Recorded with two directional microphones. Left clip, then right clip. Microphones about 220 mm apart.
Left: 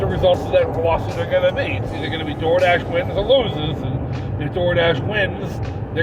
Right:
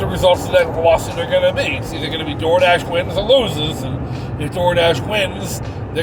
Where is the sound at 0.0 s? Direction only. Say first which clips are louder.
Right 2 dB; 20° right (ahead or behind).